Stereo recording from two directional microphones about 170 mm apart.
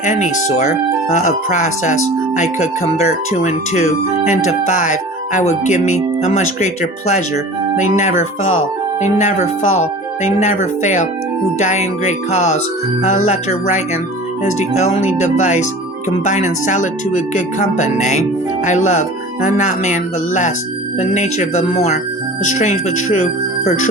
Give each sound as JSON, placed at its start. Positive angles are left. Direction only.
{"t": 0.0, "sound": "speech", "side_deg": 45}
{"t": 7.8, "sound": "speech", "side_deg": 45}